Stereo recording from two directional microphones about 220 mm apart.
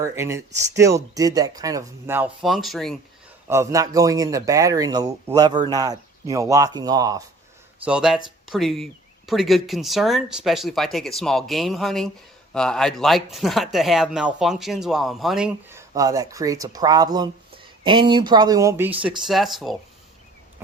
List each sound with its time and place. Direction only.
0.0 s speech: 10° right (ahead or behind)
3.4 s speech: 10° right (ahead or behind)
7.9 s speech: 5° right (ahead or behind)
16.0 s speech: 15° right (ahead or behind); by 19.7 s centre (ahead or behind)